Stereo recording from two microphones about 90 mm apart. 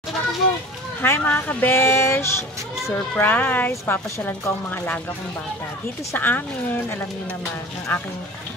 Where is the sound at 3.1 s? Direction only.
20° left (ahead or behind).